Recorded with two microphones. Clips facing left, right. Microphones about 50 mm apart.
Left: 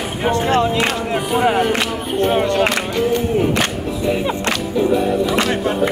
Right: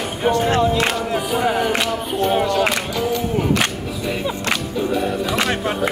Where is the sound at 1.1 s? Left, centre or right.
Centre.